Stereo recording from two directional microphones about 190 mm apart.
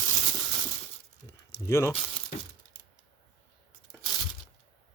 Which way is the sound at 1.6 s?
15° left (ahead or behind).